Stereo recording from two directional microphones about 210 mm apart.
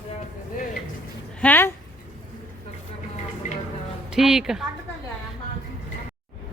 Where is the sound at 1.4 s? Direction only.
10° left (ahead or behind).